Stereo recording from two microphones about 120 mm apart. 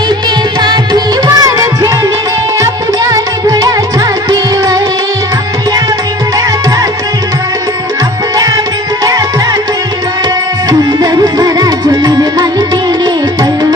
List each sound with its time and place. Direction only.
0.6 s music: 35° right (ahead or behind)
10.7 s music: 35° right (ahead or behind)